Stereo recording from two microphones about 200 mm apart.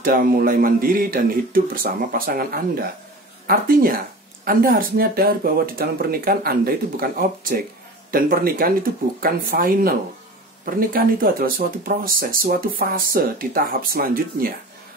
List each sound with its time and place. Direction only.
0.0 s speech: 45° right (ahead or behind)